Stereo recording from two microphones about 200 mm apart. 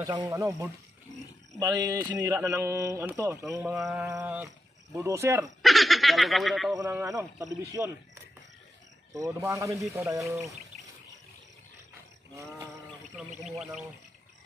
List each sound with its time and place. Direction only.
0.0 s speech: 20° right (ahead or behind)
5.6 s speech: centre (ahead or behind)
6.8 s speech: 15° right (ahead or behind)
9.1 s speech: 15° right (ahead or behind)
13.5 s speech: 5° right (ahead or behind)